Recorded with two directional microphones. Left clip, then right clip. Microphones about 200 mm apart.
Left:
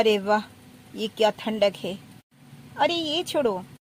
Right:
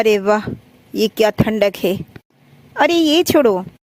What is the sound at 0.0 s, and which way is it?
Speech, 55° right (ahead or behind).